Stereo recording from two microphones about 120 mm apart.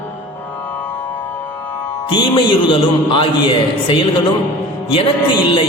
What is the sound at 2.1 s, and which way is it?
Music, 45° left (ahead or behind).